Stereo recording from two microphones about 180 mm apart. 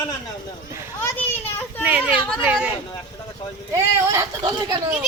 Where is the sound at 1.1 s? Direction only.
10° left (ahead or behind).